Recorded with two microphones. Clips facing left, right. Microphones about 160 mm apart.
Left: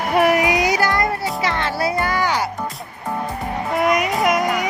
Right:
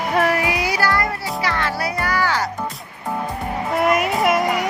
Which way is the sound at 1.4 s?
25° left (ahead or behind).